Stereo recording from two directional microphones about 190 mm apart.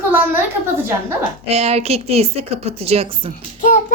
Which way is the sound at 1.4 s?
35° right (ahead or behind).